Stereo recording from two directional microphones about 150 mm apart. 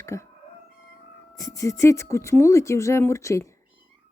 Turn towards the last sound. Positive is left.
turn(degrees=20)  # may be behind; listen again after turning